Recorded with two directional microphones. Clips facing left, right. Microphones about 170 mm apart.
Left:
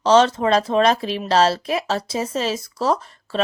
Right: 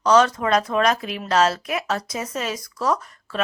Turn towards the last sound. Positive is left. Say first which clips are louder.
# left 3 dB
turn(degrees=25)  # may be behind; listen again after turning